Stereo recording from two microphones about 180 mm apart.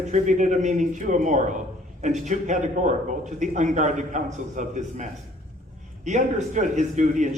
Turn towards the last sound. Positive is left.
turn(degrees=-45)  # may be behind; listen again after turning